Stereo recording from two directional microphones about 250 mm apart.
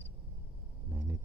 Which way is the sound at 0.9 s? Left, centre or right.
Centre.